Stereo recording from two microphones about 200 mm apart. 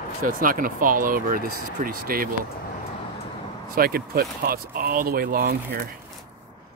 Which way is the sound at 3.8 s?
50° right (ahead or behind).